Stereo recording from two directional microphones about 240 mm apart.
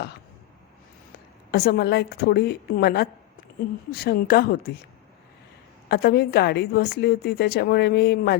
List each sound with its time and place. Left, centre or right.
1.5 s a woman's voice: left
5.9 s a woman's voice: left